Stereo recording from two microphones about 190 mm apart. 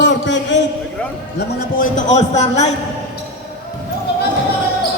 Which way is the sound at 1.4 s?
40° left (ahead or behind).